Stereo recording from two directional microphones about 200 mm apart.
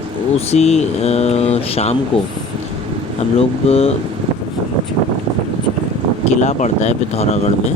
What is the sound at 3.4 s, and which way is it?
Speech, 30° left (ahead or behind).